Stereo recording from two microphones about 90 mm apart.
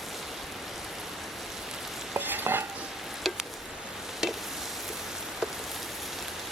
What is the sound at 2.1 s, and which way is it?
Stir, 20° right (ahead or behind).